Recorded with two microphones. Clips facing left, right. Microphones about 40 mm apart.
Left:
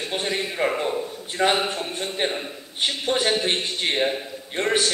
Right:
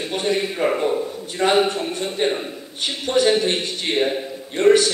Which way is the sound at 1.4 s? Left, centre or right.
Centre.